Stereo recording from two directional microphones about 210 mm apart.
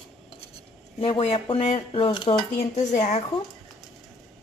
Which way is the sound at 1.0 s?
25° left (ahead or behind).